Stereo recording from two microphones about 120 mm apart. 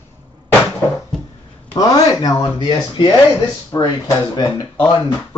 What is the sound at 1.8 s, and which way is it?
Speech, 30° left (ahead or behind).